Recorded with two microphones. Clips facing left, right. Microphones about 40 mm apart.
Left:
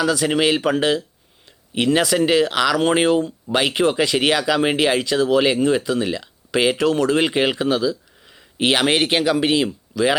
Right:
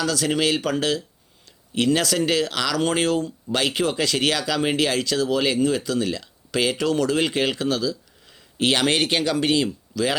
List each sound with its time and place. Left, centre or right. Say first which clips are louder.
0.0 s speech: left 4 dB; centre